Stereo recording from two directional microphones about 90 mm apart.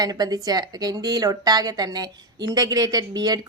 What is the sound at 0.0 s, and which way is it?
A woman's voice, 50° right (ahead or behind).